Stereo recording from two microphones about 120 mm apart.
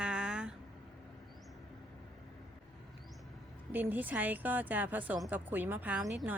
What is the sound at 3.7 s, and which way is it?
A woman's voice, 15° right (ahead or behind).